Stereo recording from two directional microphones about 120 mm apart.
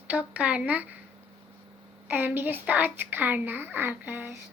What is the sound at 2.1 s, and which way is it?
Speech, 15° right (ahead or behind).